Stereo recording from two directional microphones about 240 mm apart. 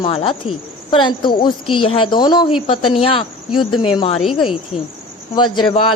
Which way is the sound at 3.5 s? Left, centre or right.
Left.